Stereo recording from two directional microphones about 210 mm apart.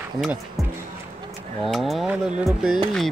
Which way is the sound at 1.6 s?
Centre (ahead or behind).